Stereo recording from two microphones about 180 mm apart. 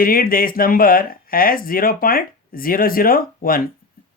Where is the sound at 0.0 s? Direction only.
55° left (ahead or behind).